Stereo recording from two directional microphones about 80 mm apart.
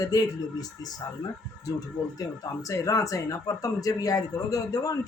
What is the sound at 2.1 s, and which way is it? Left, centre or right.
Speech, left.